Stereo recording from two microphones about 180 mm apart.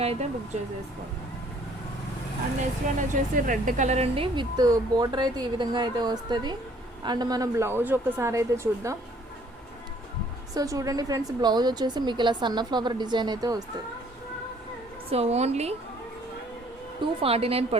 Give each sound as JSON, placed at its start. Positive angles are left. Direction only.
{"t": 0.0, "sound": "a woman's voice", "side_deg": -35}
{"t": 2.8, "sound": "a woman's voice", "side_deg": -45}
{"t": 10.5, "sound": "speech", "side_deg": -20}
{"t": 15.1, "sound": "a woman's voice", "side_deg": -35}
{"t": 17.0, "sound": "a woman's voice", "side_deg": -30}